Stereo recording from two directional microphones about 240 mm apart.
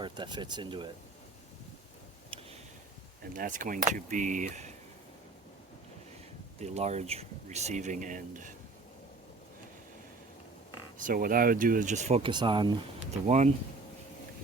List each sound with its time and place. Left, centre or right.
0.0 s speech: centre
3.3 s speech: right
6.6 s speech: right
10.9 s speech: right; by 12.7 s centre
13.2 s speech: right